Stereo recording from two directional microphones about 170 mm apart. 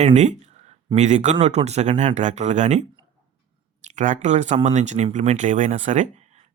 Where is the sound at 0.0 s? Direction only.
40° right (ahead or behind).